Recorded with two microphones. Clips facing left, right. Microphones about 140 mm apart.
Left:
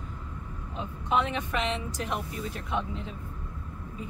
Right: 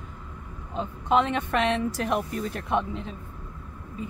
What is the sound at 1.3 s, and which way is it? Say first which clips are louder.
Speech: right 6 dB; 65° right (ahead or behind).